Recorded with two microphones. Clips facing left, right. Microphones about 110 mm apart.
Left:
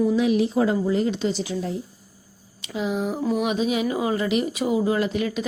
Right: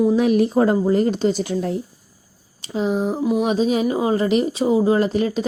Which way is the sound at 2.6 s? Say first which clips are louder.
Right 5 dB; 35° right (ahead or behind).